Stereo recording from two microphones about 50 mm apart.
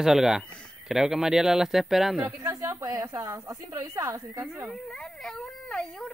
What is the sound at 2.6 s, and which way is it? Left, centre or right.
A woman's voice, right.